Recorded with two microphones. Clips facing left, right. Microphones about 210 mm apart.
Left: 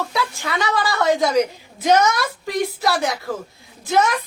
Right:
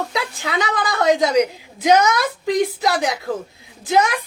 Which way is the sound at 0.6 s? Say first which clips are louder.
Even; 20° right (ahead or behind).